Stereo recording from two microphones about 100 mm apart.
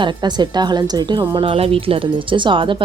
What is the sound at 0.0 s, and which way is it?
Speech, 45° right (ahead or behind).